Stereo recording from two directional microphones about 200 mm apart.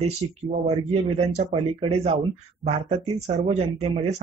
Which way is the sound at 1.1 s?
35° right (ahead or behind).